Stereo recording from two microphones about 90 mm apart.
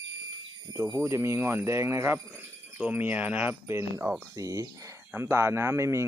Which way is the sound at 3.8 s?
30° right (ahead or behind).